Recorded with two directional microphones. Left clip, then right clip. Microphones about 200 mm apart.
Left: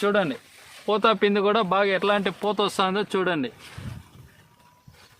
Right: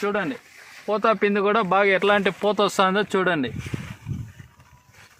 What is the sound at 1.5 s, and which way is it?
Speech, 25° right (ahead or behind).